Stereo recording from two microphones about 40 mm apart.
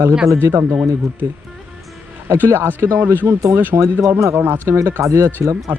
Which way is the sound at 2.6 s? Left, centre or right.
Right.